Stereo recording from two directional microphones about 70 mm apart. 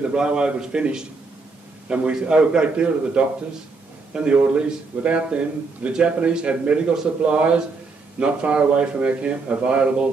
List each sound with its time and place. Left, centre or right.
0.0 s a man's voice: centre